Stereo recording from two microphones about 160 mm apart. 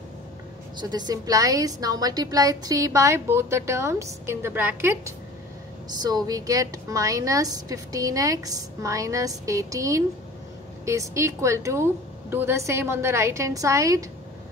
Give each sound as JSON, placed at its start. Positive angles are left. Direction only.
{"t": 0.7, "sound": "a woman's voice", "side_deg": -25}
{"t": 5.9, "sound": "a woman's voice", "side_deg": -25}